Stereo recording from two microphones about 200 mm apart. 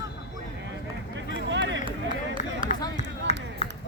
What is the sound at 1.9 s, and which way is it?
Run, 25° right (ahead or behind).